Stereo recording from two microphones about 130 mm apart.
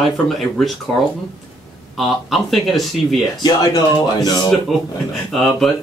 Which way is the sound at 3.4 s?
30° left (ahead or behind).